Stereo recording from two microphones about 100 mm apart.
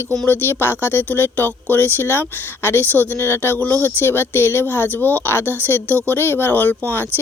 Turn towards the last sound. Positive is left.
turn(degrees=20)  # may be behind; listen again after turning